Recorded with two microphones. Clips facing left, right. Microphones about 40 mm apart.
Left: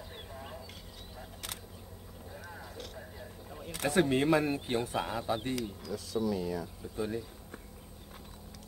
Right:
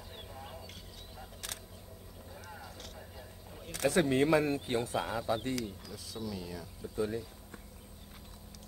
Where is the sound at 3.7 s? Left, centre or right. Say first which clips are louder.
Even; left.